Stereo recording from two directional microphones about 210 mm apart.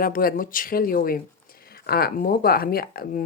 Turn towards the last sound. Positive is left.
turn(degrees=45)  # may be behind; listen again after turning